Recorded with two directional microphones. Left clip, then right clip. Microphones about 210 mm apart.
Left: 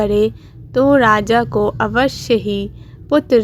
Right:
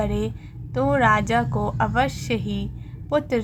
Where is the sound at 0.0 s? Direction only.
20° left (ahead or behind).